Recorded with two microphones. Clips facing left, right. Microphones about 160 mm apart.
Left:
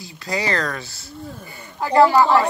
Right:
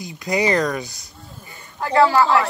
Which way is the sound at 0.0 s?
20° right (ahead or behind).